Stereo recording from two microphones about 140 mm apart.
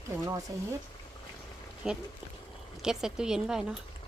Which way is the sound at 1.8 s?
5° right (ahead or behind).